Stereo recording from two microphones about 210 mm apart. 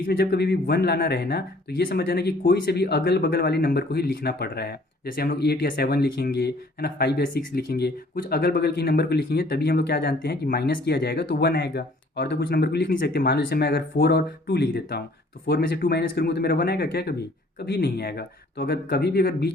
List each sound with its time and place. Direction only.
0.0 s speech: 45° left (ahead or behind)